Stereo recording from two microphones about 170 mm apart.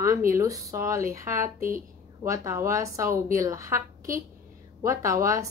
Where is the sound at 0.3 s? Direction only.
20° right (ahead or behind).